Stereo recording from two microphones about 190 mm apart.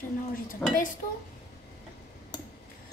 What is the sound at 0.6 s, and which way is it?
Speech, 10° left (ahead or behind).